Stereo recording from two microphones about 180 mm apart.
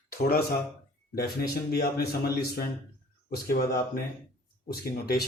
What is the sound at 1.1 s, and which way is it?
Speech, 60° left (ahead or behind).